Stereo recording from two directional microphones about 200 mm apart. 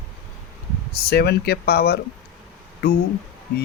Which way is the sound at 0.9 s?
50° left (ahead or behind).